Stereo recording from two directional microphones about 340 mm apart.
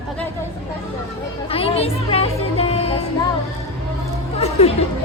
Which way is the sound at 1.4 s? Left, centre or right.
Centre.